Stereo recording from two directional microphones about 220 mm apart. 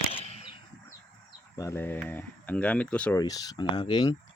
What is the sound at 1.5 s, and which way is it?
Speech, 10° left (ahead or behind).